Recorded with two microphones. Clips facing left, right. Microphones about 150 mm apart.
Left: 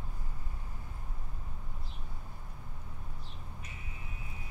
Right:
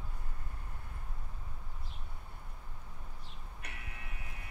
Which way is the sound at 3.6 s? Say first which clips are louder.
Left 1 dB; 70° right (ahead or behind).